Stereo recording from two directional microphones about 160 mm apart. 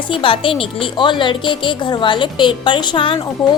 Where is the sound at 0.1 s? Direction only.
30° left (ahead or behind).